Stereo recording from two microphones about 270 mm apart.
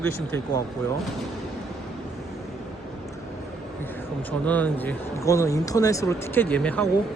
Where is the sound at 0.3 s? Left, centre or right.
Centre.